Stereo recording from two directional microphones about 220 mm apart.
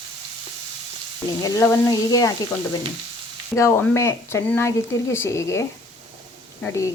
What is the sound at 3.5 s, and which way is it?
Speech, 15° left (ahead or behind).